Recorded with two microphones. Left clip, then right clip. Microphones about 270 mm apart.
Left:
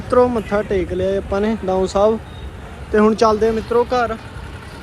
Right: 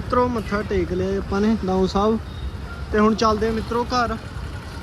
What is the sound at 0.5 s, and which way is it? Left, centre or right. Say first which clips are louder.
Speech: left 4 dB; centre.